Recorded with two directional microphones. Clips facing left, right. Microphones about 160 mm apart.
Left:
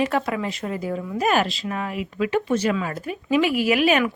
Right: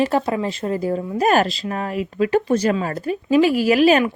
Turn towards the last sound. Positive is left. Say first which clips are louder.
# right 4 dB
turn(degrees=-35)  # may be behind; listen again after turning